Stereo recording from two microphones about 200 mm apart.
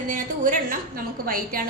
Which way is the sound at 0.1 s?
40° right (ahead or behind).